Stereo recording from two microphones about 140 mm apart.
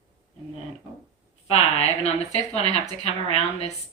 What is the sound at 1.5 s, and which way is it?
A woman's voice, 50° left (ahead or behind).